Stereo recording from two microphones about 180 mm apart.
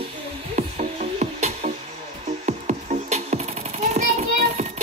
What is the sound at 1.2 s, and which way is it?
Music, 40° right (ahead or behind).